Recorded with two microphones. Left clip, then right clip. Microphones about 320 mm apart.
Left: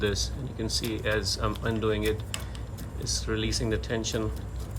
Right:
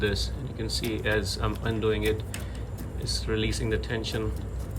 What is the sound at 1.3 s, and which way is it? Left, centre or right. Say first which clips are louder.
Speech: left 1 dB; centre.